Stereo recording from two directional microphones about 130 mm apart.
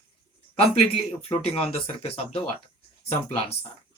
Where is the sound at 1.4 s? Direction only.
50° left (ahead or behind).